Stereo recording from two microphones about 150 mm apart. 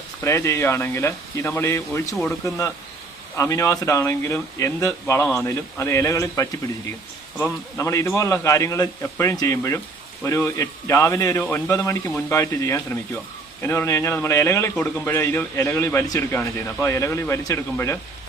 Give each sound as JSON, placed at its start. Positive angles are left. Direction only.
{"t": 0.3, "sound": "speech", "side_deg": 20}
{"t": 3.3, "sound": "a man's voice", "side_deg": 20}